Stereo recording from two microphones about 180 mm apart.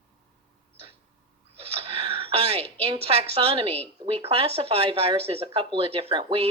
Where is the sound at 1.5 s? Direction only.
30° right (ahead or behind).